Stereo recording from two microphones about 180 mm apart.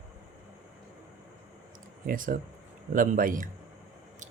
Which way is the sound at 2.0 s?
50° right (ahead or behind).